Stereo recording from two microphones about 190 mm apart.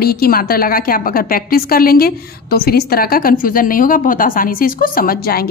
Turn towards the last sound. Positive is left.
turn(degrees=50)  # may be behind; listen again after turning